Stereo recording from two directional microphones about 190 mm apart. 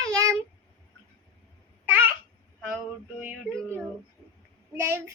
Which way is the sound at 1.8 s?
10° right (ahead or behind).